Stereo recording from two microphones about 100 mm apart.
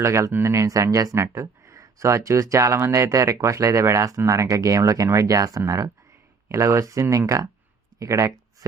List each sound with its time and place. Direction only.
0.0 s speech: 25° right (ahead or behind)